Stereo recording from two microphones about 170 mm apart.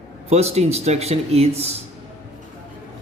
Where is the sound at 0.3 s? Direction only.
40° right (ahead or behind).